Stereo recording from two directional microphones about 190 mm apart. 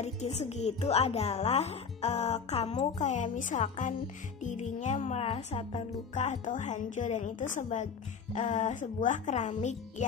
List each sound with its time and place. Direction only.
0.0 s speech: 35° left (ahead or behind)